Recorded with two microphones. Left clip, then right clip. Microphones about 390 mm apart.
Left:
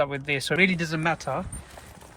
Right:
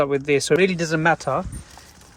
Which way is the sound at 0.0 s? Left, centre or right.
Centre.